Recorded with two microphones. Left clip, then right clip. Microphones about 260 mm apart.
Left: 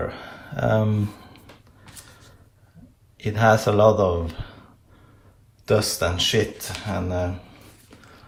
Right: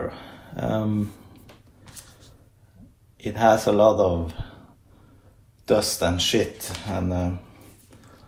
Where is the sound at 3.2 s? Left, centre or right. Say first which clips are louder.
Even; left.